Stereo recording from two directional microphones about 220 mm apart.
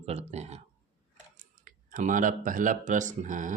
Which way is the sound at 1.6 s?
35° right (ahead or behind).